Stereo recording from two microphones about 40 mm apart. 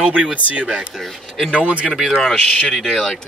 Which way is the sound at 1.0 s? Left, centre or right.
Centre.